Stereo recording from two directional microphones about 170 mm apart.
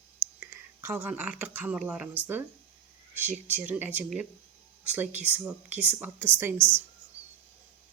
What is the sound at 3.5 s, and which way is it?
Speech, 10° right (ahead or behind).